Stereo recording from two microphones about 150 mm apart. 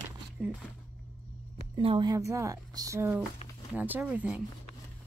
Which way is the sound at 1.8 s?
35° right (ahead or behind).